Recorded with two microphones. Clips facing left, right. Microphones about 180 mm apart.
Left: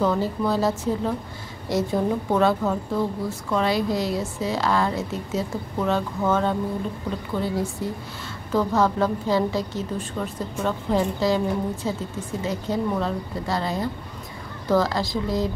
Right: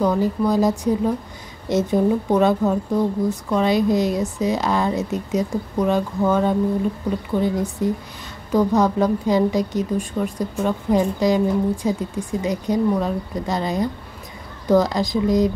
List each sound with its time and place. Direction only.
0.0 s a woman's voice: 15° right (ahead or behind)